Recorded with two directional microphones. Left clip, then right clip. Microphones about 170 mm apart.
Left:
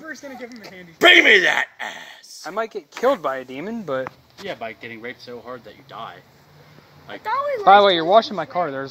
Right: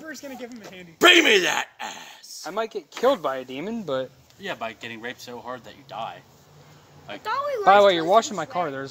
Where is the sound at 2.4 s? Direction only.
10° left (ahead or behind).